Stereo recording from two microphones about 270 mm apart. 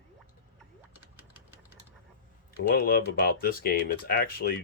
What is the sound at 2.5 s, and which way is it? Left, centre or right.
Speech, left.